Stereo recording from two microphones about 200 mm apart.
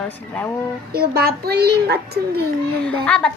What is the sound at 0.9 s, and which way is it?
A child's voice, 50° right (ahead or behind).